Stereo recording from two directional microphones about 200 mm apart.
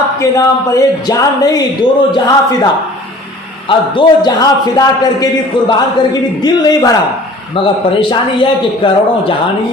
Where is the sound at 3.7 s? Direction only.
25° left (ahead or behind).